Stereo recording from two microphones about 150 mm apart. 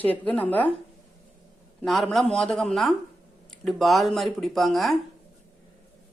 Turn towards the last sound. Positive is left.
turn(degrees=0)  # may be behind; listen again after turning